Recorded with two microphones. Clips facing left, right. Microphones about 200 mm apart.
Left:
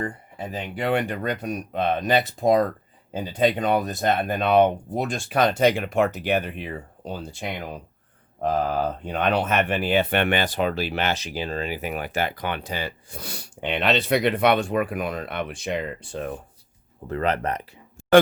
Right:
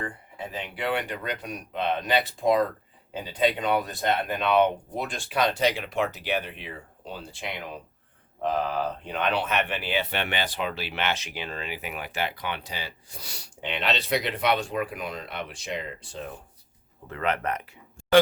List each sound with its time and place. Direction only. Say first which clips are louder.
0.0 s speech: left 4 dB; 40° left (ahead or behind)
17.1 s speech: left 4 dB; 35° left (ahead or behind)